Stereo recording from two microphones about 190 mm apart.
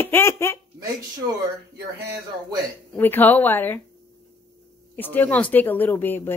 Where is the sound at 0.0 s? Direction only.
10° left (ahead or behind).